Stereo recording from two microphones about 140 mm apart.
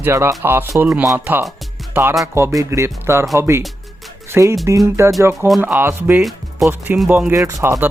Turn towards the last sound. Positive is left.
turn(degrees=-20)  # may be behind; listen again after turning